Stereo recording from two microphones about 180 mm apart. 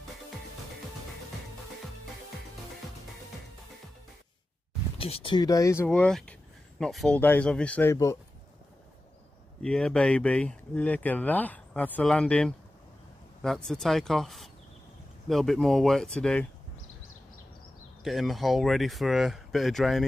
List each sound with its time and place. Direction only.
4.9 s speech: 30° left (ahead or behind)
5.9 s speech: 5° left (ahead or behind)
9.6 s speech: 5° left (ahead or behind)
18.0 s speech: centre (ahead or behind)